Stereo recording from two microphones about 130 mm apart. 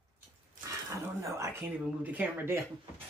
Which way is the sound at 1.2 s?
25° right (ahead or behind).